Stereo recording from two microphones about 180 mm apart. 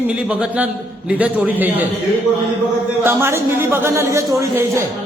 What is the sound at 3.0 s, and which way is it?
A man's voice, 15° right (ahead or behind).